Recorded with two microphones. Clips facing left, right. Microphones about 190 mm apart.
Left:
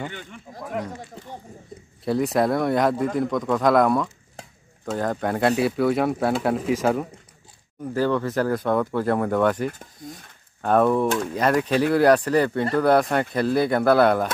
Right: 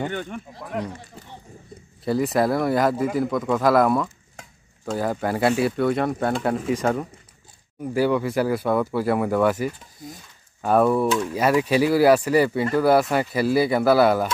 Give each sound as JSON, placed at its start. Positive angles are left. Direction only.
{"t": 0.1, "sound": "speech", "side_deg": -55}
{"t": 0.7, "sound": "speech", "side_deg": 0}
{"t": 2.0, "sound": "speech", "side_deg": 0}
{"t": 4.4, "sound": "a sound", "side_deg": 30}
{"t": 4.8, "sound": "speech", "side_deg": -5}
{"t": 7.8, "sound": "speech", "side_deg": -10}